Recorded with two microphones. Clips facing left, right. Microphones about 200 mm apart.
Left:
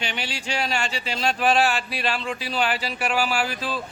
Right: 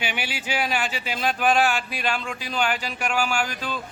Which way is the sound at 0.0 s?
5° right (ahead or behind).